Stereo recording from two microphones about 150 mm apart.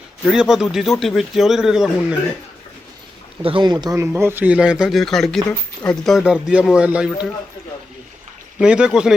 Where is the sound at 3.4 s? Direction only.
35° right (ahead or behind); by 7.3 s 5° right (ahead or behind).